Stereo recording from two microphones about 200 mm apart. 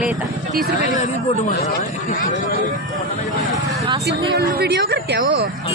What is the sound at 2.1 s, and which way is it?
Speech, 40° left (ahead or behind).